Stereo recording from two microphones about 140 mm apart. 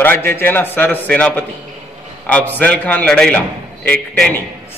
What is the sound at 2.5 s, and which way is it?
A man's voice, 10° left (ahead or behind).